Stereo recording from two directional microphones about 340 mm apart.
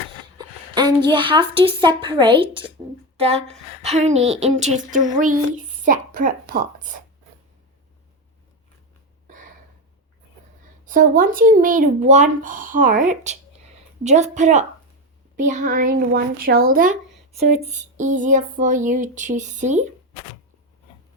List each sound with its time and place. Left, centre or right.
0.3 s a woman's voice: centre
9.2 s a sound: right
10.8 s speech: right